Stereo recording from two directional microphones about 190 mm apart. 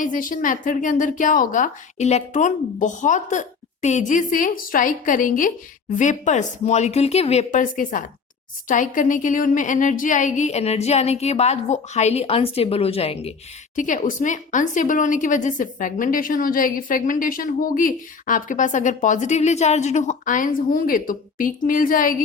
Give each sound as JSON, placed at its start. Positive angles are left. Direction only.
{"t": 0.0, "sound": "a woman's voice", "side_deg": 45}
{"t": 13.7, "sound": "a woman's voice", "side_deg": 45}